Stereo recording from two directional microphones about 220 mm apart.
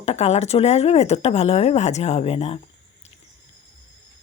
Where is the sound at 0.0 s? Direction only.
30° left (ahead or behind).